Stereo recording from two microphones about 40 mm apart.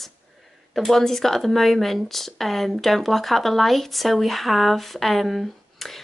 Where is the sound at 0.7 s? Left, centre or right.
Centre.